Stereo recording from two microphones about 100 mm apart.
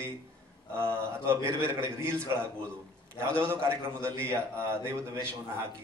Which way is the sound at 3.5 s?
25° right (ahead or behind).